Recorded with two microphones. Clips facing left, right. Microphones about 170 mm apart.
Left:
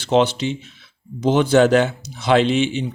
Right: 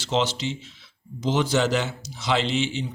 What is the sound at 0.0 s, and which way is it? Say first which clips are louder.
Speech: left 8 dB; 55° left (ahead or behind).